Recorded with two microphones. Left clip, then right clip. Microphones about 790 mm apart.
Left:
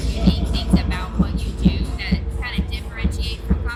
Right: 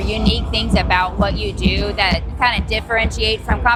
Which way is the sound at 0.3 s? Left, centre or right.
Right.